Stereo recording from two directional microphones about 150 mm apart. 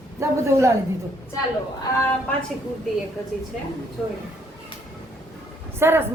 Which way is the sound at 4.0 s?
Centre (ahead or behind).